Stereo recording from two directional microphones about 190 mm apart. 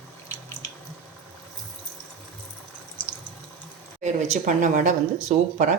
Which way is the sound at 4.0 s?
40° right (ahead or behind).